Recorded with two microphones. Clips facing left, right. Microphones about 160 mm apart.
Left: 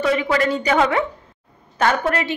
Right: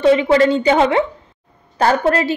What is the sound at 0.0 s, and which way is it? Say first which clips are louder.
A woman's voice: right 7 dB; 30° right (ahead or behind).